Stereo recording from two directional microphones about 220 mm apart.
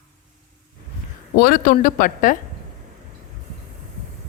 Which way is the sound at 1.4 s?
40° left (ahead or behind).